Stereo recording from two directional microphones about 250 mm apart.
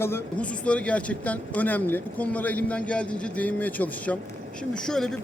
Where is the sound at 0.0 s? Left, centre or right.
Centre.